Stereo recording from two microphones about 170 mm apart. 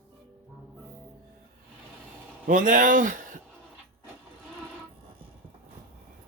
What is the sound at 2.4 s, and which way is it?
Speech, 55° right (ahead or behind).